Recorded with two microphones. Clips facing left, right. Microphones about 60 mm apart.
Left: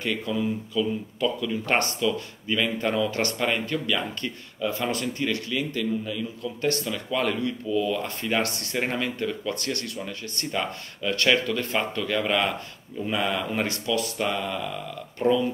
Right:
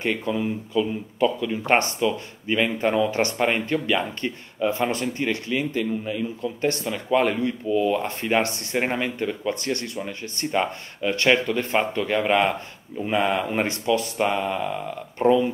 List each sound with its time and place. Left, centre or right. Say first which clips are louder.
0.0 s speech: right 2 dB; right